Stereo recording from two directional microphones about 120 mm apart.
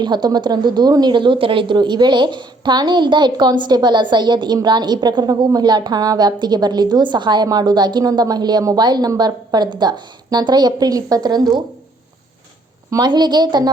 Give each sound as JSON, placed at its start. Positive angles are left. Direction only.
{"t": 0.0, "sound": "speech", "side_deg": -35}
{"t": 12.9, "sound": "speech", "side_deg": -35}